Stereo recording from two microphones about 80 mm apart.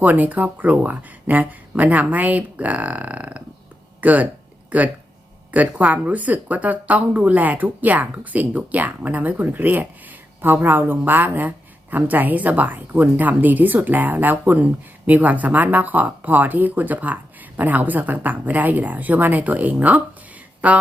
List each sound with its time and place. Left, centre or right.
0.0 s speech: right